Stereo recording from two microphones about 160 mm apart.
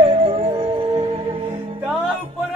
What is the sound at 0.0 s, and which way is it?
Music, 35° right (ahead or behind).